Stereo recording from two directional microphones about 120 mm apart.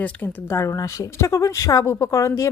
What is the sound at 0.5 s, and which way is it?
Speech, 25° left (ahead or behind).